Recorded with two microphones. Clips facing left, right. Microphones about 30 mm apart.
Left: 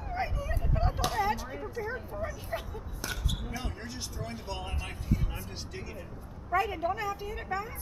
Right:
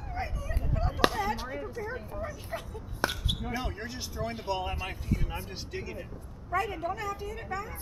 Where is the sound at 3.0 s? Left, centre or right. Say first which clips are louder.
Right 7 dB; right.